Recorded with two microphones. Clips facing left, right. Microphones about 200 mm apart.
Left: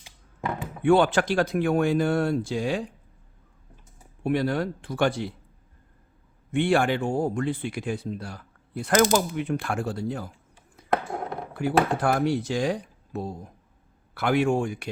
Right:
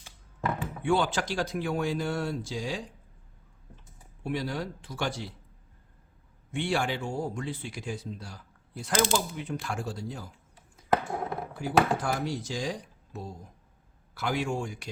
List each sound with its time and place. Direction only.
0.8 s speech: 60° left (ahead or behind)
4.2 s speech: 55° left (ahead or behind)
6.5 s speech: 55° left (ahead or behind)
10.8 s a sound: 5° right (ahead or behind)
11.5 s speech: 65° left (ahead or behind)